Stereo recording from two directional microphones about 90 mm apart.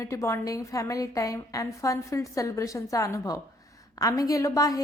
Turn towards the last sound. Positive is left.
turn(degrees=40)  # may be behind; listen again after turning